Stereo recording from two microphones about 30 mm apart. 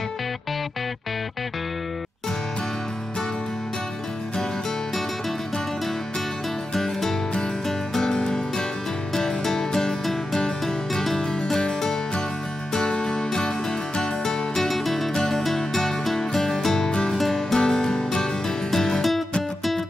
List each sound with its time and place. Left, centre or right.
6.7 s music: centre
8.1 s music: left
9.1 s music: centre
12.7 s music: left
14.7 s music: centre
15.1 s music: centre
16.9 s music: left
18.7 s music: centre